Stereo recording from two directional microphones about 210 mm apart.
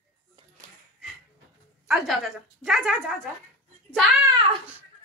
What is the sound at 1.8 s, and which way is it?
A woman's voice, centre (ahead or behind).